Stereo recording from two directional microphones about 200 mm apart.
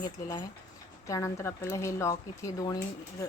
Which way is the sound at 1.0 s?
15° left (ahead or behind).